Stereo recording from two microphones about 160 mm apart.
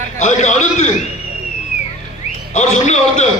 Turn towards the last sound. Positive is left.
turn(degrees=45)  # may be behind; listen again after turning